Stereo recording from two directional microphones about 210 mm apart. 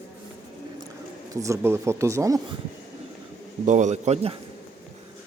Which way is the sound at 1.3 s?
15° right (ahead or behind).